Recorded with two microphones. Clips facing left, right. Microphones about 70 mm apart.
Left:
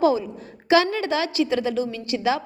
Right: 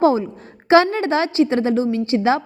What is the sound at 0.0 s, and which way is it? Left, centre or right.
A woman's voice, right.